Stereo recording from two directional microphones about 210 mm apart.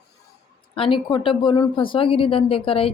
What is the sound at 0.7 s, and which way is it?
Speech, 25° left (ahead or behind).